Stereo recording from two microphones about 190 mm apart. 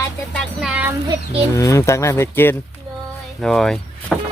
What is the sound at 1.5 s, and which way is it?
Speech, 15° left (ahead or behind).